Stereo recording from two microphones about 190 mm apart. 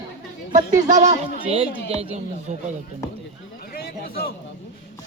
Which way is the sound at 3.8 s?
55° left (ahead or behind).